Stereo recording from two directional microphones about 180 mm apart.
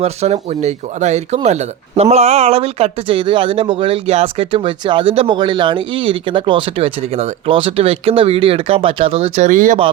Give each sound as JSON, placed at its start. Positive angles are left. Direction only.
{"t": 0.0, "sound": "speech", "side_deg": -35}